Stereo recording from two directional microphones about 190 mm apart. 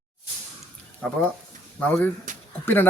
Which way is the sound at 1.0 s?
10° left (ahead or behind).